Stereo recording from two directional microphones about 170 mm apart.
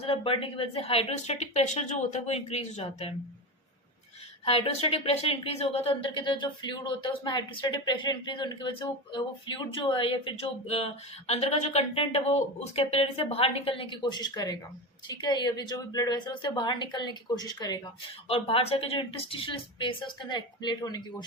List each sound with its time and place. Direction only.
0.0 s speech: 35° left (ahead or behind)
4.4 s a woman's voice: 35° left (ahead or behind)